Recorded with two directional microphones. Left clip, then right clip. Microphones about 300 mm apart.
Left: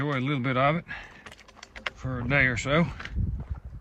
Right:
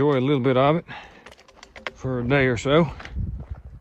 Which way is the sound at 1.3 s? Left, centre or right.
Right.